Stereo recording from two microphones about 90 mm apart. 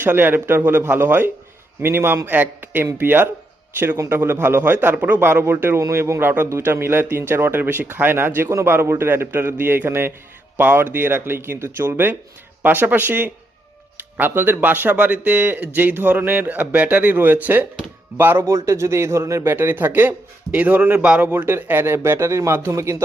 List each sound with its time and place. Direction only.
0.0 s a man's voice: 20° right (ahead or behind)
21.2 s a man's voice: 25° right (ahead or behind)